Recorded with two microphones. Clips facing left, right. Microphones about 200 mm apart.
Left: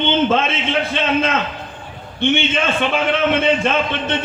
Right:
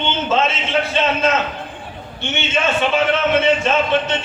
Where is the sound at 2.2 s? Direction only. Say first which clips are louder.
Left 4 dB; 55° left (ahead or behind).